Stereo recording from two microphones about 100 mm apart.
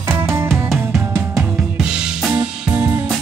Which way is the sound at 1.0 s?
25° right (ahead or behind).